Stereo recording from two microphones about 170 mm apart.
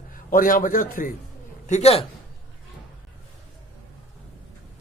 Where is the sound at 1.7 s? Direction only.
40° left (ahead or behind).